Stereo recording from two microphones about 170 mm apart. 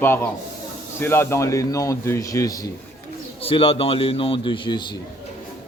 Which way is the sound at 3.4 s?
35° left (ahead or behind).